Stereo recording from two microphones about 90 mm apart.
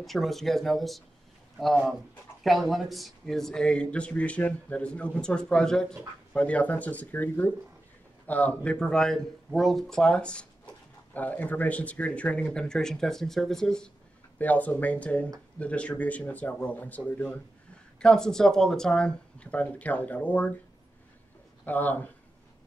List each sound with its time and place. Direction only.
0.0 s speech: centre (ahead or behind)
14.4 s speech: 15° left (ahead or behind)
21.6 s speech: 20° left (ahead or behind)